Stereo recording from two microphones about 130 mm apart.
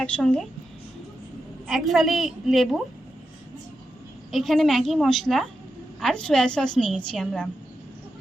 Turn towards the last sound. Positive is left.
turn(degrees=0)  # may be behind; listen again after turning